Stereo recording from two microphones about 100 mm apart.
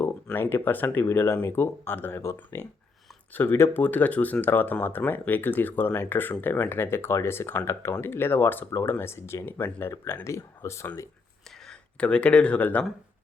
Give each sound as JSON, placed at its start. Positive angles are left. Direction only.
{"t": 0.3, "sound": "speech", "side_deg": 20}
{"t": 10.2, "sound": "speech", "side_deg": 30}
{"t": 11.6, "sound": "speech", "side_deg": 10}